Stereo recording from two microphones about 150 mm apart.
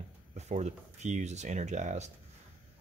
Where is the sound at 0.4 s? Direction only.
50° right (ahead or behind).